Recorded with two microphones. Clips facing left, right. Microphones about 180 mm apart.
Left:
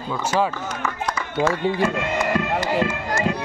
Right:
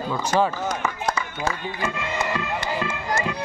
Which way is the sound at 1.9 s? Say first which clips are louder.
Left 4 dB; 50° left (ahead or behind).